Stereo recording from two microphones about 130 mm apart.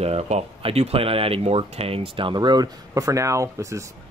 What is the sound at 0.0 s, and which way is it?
Speech, 55° right (ahead or behind).